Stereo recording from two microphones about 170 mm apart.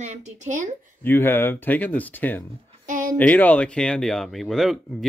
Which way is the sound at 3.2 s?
10° left (ahead or behind).